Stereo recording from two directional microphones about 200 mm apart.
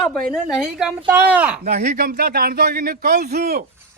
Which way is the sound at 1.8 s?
50° right (ahead or behind).